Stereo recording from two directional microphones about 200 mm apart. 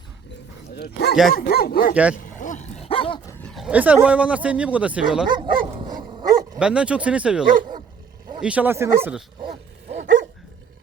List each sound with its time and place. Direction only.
0.8 s dog: 55° left (ahead or behind)
2.2 s a sound: 40° left (ahead or behind)
2.9 s dog: 25° left (ahead or behind)
3.5 s speech: 5° right (ahead or behind)
5.3 s dog: 20° right (ahead or behind)
6.6 s speech: 5° right (ahead or behind)